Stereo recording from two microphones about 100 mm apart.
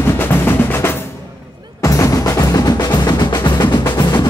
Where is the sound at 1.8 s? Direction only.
30° left (ahead or behind).